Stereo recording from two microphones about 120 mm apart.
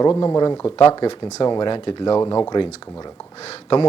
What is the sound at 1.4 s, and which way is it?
Speech, 40° left (ahead or behind).